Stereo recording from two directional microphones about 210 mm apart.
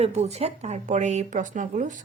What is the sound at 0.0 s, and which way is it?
A woman's voice, 30° right (ahead or behind).